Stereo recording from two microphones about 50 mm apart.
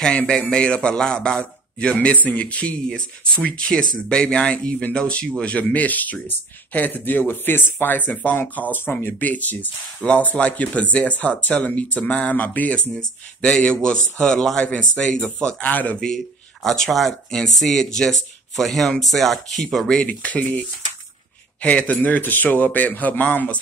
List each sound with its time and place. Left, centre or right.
0.4 s a man's voice: centre
3.6 s a man's voice: centre
5.4 s speech: left
12.9 s a man's voice: centre
14.7 s speech: left
16.6 s a man's voice: centre
20.1 s speech: left